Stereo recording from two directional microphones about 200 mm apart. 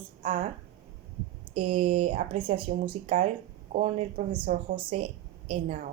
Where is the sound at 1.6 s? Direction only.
25° right (ahead or behind).